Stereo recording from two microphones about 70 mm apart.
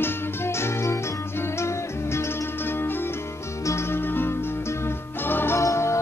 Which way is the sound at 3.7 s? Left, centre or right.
Left.